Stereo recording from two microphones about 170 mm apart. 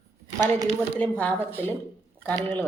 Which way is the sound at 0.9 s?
10° left (ahead or behind).